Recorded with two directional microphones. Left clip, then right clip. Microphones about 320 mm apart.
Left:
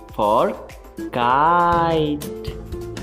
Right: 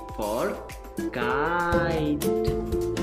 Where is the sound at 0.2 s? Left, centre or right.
Centre.